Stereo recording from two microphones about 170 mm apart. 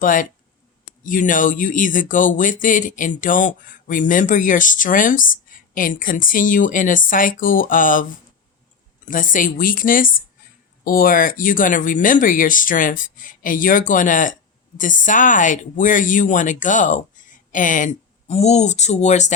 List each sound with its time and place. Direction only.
0.0 s speech: 50° left (ahead or behind)
9.0 s speech: 50° left (ahead or behind)